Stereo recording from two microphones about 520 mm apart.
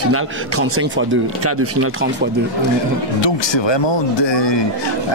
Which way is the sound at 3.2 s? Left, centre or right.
Left.